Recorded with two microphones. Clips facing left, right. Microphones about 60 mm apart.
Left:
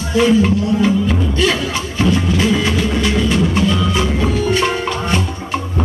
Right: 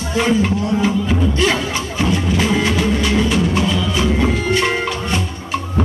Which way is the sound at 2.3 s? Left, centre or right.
Centre.